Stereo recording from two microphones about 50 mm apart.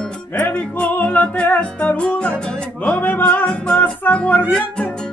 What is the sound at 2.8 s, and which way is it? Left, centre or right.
Music, left.